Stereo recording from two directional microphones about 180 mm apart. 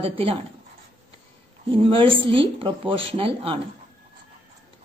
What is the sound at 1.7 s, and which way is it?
Speech, 30° right (ahead or behind).